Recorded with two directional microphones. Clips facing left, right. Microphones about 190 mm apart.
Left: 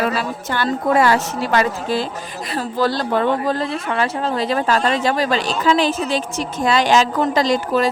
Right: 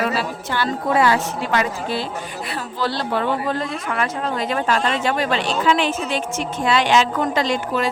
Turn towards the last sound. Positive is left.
turn(degrees=40)  # may be behind; listen again after turning